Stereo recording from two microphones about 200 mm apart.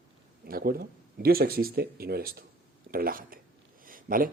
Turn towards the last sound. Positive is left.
turn(degrees=-45)  # may be behind; listen again after turning